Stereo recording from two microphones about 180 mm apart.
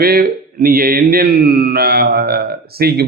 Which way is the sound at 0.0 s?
55° right (ahead or behind).